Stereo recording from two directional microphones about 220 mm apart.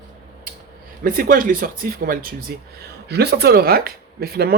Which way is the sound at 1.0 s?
40° right (ahead or behind).